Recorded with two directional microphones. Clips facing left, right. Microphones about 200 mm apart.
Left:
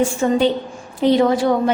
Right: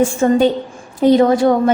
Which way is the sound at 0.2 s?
45° right (ahead or behind).